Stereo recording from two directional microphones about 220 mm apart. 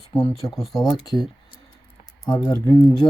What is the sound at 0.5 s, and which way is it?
Speech, centre (ahead or behind).